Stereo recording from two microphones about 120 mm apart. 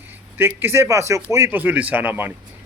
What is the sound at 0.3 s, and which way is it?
A man's voice, 20° right (ahead or behind).